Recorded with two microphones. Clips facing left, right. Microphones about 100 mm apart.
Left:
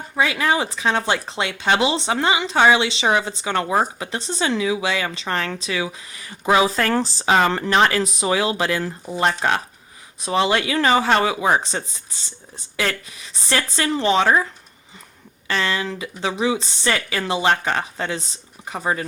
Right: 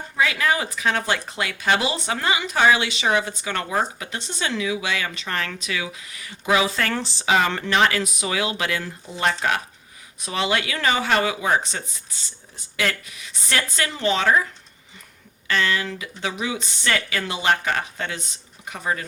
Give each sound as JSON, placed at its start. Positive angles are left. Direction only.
{"t": 0.2, "sound": "speech", "side_deg": 25}
{"t": 15.4, "sound": "speech", "side_deg": 30}